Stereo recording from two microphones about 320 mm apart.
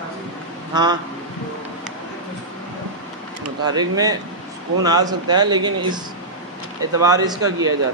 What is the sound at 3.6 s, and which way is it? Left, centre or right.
A man's voice, centre.